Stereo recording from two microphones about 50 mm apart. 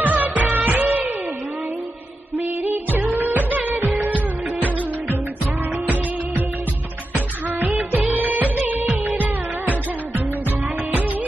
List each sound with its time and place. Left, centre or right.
0.0 s music: right
2.3 s music of bollywood: right
7.2 s music: right